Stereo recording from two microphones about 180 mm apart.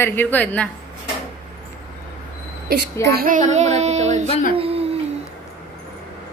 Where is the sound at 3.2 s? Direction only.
50° right (ahead or behind).